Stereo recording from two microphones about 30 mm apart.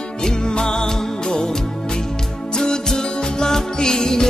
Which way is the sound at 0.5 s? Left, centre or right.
Left.